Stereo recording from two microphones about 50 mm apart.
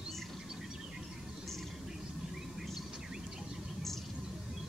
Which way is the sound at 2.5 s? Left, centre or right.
Centre.